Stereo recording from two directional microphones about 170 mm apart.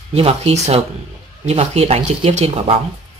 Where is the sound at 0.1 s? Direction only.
35° right (ahead or behind).